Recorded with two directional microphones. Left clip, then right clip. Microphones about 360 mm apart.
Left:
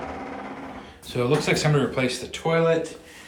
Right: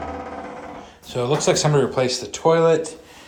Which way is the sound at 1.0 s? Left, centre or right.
Centre.